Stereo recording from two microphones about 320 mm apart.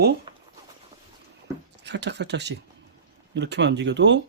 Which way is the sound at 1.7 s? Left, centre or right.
Right.